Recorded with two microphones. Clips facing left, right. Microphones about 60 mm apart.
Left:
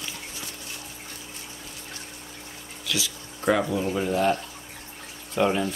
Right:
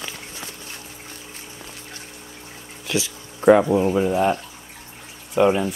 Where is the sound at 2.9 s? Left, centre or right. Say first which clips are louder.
Right 5 dB; right.